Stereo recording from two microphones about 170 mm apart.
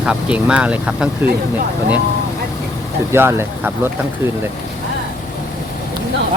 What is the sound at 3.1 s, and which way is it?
Speech, 15° right (ahead or behind).